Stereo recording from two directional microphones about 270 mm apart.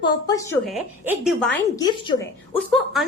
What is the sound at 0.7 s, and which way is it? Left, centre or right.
Speech, centre.